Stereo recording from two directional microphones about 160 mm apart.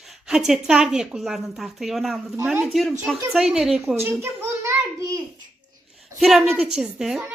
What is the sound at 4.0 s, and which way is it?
A child's voice, 15° right (ahead or behind).